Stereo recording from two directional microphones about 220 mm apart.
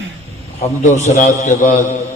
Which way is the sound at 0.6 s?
30° left (ahead or behind).